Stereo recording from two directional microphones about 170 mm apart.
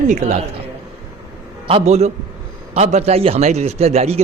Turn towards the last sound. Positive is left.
turn(degrees=-40)  # may be behind; listen again after turning